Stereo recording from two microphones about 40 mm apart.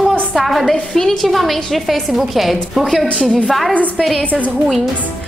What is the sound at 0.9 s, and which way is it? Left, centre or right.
Speech, centre.